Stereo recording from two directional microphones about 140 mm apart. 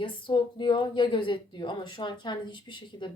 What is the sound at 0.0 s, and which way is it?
A woman's voice, 35° left (ahead or behind).